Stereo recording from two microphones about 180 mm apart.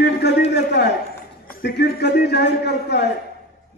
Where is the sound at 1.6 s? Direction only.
65° left (ahead or behind).